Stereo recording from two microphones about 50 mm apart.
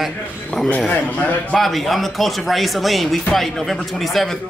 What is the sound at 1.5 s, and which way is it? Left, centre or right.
Speech, centre.